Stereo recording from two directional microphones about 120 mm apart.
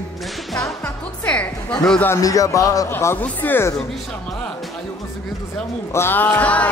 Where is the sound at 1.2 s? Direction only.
10° left (ahead or behind).